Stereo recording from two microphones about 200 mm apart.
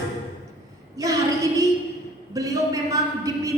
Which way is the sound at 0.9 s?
15° right (ahead or behind).